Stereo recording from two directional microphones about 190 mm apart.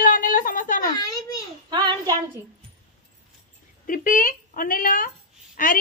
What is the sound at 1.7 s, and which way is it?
Child singing, 25° right (ahead or behind).